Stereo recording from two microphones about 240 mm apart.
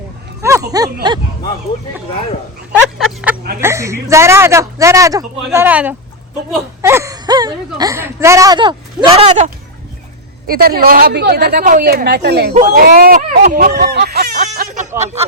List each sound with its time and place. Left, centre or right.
0.7 s a woman's voice: centre
2.7 s speech: centre
3.6 s a woman's voice: centre
10.4 s a woman's voice: right